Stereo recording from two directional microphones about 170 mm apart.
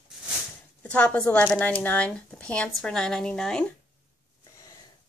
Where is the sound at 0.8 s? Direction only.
5° left (ahead or behind).